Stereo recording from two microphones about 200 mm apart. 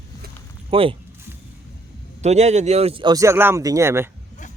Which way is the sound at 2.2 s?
35° right (ahead or behind).